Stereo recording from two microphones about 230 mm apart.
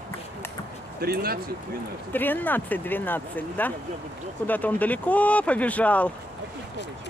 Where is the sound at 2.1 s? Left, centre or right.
Centre.